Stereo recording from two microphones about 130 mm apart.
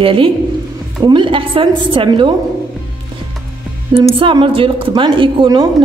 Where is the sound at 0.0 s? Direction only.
45° right (ahead or behind).